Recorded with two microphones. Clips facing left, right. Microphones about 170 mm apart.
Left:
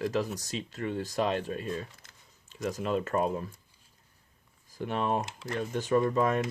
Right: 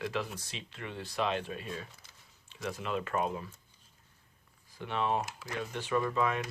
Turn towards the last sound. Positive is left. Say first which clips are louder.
# left 5 dB
turn(degrees=40)  # may be behind; listen again after turning